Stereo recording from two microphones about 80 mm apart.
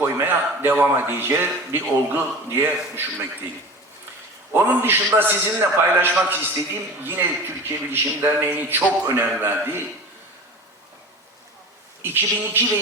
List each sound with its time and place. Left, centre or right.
0.0 s a man's voice: right
4.5 s a man's voice: right
12.0 s a man's voice: right